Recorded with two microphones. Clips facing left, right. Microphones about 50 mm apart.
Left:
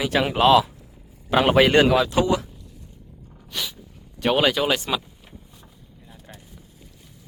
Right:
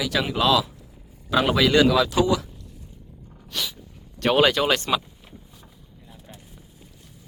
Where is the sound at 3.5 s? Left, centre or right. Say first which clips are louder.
Even; centre.